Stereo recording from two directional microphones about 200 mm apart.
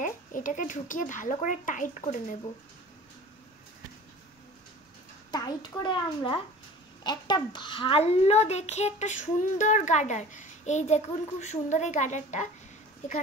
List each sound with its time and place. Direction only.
0.0 s a child's voice: 40° left (ahead or behind)
5.3 s a child's voice: 20° left (ahead or behind); by 12.4 s 35° left (ahead or behind)